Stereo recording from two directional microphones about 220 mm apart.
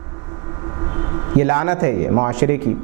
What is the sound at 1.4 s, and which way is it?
A man's voice, 10° right (ahead or behind).